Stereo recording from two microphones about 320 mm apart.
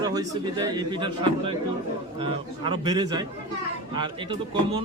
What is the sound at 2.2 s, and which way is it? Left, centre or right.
Speech, centre.